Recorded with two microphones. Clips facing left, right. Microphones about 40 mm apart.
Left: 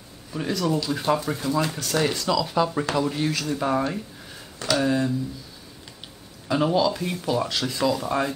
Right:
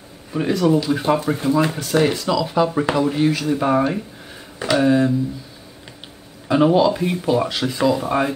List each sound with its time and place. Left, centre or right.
0.3 s speech: right
6.4 s speech: right